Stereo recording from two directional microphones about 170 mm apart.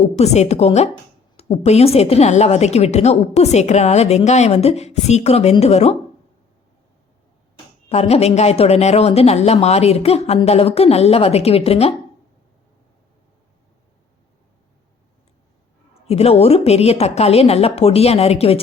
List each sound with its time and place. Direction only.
0.0 s a woman's voice: 40° left (ahead or behind)
7.9 s a woman's voice: 35° left (ahead or behind)
16.0 s a woman's voice: 35° left (ahead or behind)